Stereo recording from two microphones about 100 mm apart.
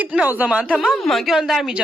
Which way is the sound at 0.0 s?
15° right (ahead or behind).